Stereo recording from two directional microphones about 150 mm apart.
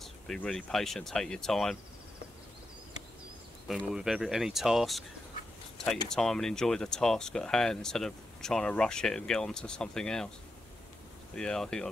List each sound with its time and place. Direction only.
0.0 s speech: 5° left (ahead or behind)
3.6 s speech: 5° right (ahead or behind)
6.0 s speech: 5° left (ahead or behind)
11.3 s speech: 5° left (ahead or behind)